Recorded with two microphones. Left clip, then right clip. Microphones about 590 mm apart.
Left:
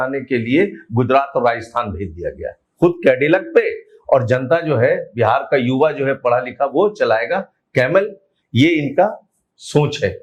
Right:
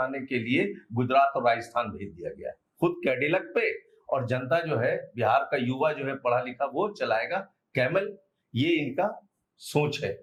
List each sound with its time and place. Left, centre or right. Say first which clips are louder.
0.0 s speech: left 10 dB; left
9.6 s speech: left 10 dB; left